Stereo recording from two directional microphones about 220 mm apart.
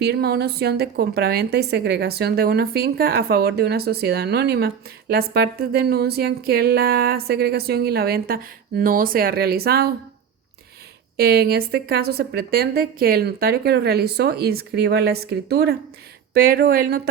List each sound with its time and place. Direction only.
0.0 s a woman's voice: 45° right (ahead or behind)
11.2 s a woman's voice: 45° right (ahead or behind)